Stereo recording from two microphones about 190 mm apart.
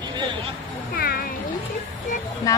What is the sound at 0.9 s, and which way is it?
Speech, 50° left (ahead or behind).